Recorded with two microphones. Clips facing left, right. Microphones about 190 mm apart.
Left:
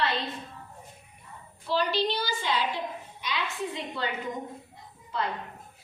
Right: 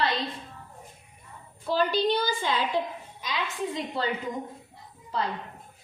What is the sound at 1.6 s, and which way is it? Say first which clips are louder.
A woman's voice: right 3 dB; 50° right (ahead or behind).